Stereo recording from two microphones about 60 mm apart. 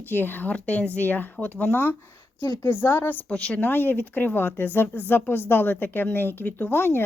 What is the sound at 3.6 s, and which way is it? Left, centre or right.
A woman's voice, left.